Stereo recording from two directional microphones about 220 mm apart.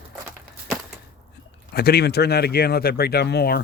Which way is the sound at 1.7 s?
45° left (ahead or behind).